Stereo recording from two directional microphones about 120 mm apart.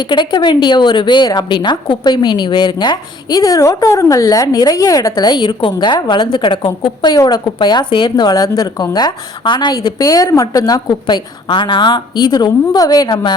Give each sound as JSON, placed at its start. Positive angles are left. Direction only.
{"t": 0.0, "sound": "a woman's voice", "side_deg": 40}
{"t": 7.1, "sound": "a woman's voice", "side_deg": 35}